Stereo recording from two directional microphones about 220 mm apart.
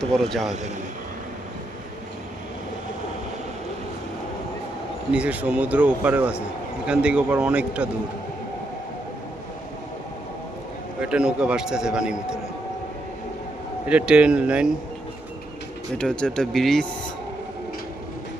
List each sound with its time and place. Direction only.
0.0 s a man's voice: centre (ahead or behind)
5.1 s a man's voice: 5° right (ahead or behind)
11.0 s a man's voice: 5° right (ahead or behind)
13.8 s a man's voice: 5° right (ahead or behind)
16.0 s a man's voice: 5° left (ahead or behind)